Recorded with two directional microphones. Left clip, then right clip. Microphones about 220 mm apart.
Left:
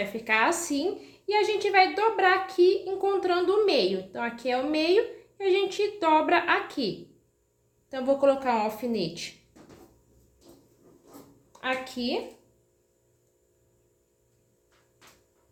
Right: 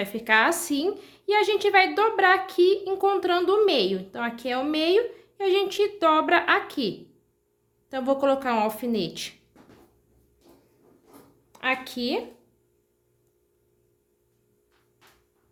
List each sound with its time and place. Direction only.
0.0 s a woman's voice: 40° right (ahead or behind)
11.5 s a woman's voice: 45° right (ahead or behind)